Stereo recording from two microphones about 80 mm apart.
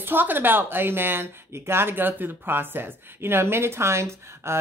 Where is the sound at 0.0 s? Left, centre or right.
Right.